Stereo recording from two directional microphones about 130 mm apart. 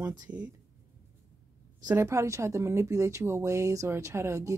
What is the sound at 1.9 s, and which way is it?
Speech, 25° right (ahead or behind).